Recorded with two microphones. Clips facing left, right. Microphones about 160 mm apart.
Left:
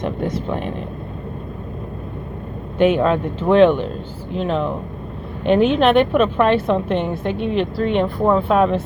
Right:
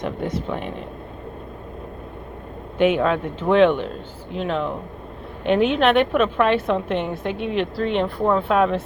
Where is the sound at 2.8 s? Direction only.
35° left (ahead or behind).